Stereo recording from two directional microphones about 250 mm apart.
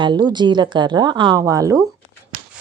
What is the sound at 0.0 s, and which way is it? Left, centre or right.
A woman's voice, centre.